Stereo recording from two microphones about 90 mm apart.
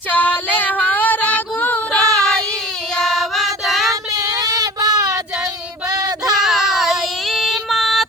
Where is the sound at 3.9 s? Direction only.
40° right (ahead or behind).